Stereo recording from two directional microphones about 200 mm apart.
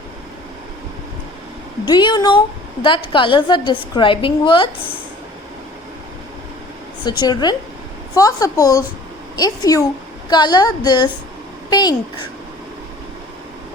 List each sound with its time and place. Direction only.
1.8 s a woman's voice: 20° left (ahead or behind)
7.2 s a woman's voice: 20° left (ahead or behind)